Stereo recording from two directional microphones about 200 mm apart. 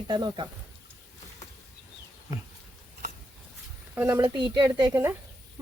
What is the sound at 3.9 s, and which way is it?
Speech, 10° right (ahead or behind).